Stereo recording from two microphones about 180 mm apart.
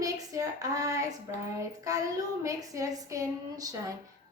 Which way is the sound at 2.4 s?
20° right (ahead or behind).